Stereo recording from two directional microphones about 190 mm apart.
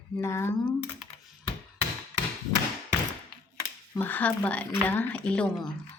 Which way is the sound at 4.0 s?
10° left (ahead or behind).